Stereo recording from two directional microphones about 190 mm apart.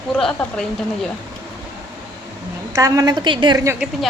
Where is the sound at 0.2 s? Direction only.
5° left (ahead or behind).